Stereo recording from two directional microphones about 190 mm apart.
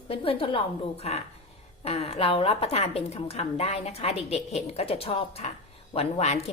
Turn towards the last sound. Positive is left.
turn(degrees=35)  # may be behind; listen again after turning